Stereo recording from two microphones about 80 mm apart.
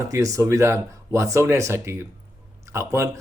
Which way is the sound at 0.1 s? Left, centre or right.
Right.